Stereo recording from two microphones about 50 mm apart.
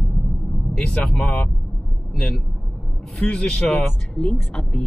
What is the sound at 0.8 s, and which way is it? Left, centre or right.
Speech, left.